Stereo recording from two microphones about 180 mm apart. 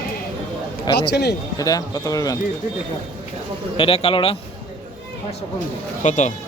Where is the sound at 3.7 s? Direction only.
30° left (ahead or behind).